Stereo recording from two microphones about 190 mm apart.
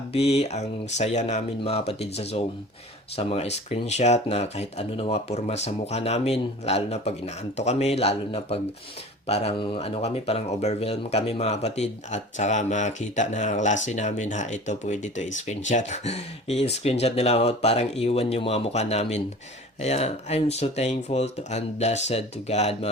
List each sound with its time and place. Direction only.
0.1 s speech: 30° left (ahead or behind)